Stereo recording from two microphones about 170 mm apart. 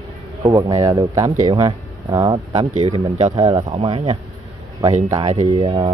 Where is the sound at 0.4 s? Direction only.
20° right (ahead or behind).